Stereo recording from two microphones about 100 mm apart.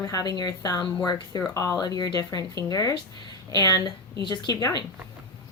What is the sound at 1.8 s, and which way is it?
A woman's voice, 40° left (ahead or behind).